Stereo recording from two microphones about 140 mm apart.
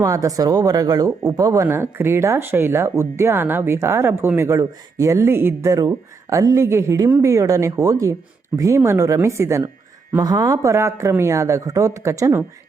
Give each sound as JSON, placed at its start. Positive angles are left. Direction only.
{"t": 0.0, "sound": "speech", "side_deg": -25}